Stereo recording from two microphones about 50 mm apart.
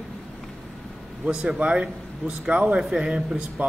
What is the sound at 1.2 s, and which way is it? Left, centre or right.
A man's voice, centre.